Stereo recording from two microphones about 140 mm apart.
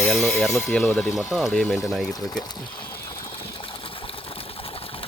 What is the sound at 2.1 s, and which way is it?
Speech, 25° left (ahead or behind).